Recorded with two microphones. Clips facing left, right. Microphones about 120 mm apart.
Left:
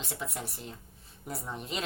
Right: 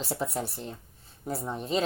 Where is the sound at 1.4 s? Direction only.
30° right (ahead or behind).